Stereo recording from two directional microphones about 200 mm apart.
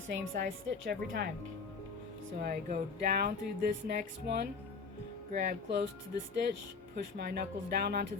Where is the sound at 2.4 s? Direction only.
50° right (ahead or behind).